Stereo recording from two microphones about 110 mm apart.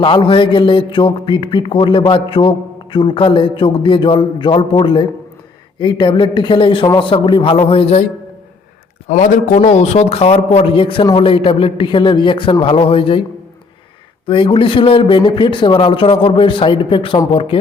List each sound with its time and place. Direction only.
0.0 s a man's voice: 50° left (ahead or behind)
9.0 s a man's voice: 90° left; by 13.2 s 55° left (ahead or behind)
14.3 s a man's voice: 50° left (ahead or behind)